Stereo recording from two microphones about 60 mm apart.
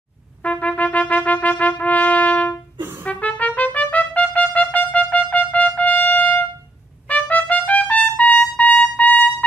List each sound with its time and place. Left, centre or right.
0.4 s trumpet: left